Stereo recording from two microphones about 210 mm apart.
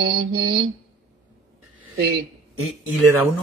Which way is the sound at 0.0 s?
45° right (ahead or behind).